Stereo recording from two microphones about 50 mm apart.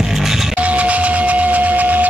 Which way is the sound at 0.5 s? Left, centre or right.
Right.